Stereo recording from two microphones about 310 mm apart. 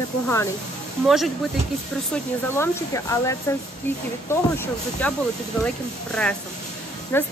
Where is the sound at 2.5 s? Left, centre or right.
Centre.